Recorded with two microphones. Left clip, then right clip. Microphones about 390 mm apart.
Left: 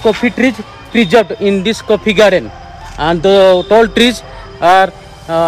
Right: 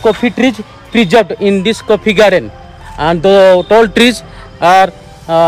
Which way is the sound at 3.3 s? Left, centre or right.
Right.